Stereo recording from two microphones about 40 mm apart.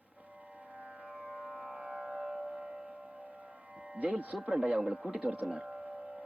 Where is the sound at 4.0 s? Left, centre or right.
Right.